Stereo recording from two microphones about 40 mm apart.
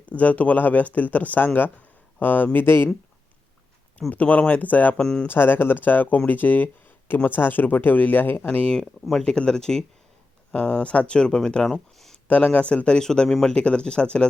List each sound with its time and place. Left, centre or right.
0.0 s speech: left
2.6 s speech: left
4.1 s speech: left
4.9 s speech: centre
5.3 s speech: left
7.3 s speech: left
8.4 s speech: left
9.2 s speech: left
10.5 s speech: left
11.6 s speech: centre
12.3 s speech: left
13.0 s speech: centre
13.5 s speech: left